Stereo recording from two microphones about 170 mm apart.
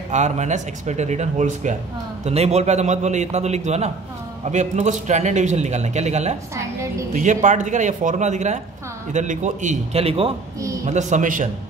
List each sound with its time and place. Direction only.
0.1 s a man's voice: 45° right (ahead or behind)
6.5 s a woman's voice: 15° right (ahead or behind)
7.1 s a man's voice: 50° right (ahead or behind)